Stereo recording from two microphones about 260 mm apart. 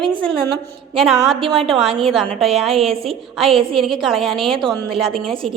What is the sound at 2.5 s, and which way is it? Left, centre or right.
A woman's voice, right.